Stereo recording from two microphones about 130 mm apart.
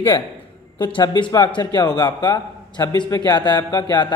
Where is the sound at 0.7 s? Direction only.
35° left (ahead or behind).